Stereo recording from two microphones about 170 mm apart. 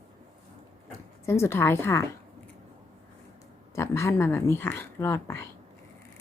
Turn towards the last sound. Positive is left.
turn(degrees=15)  # may be behind; listen again after turning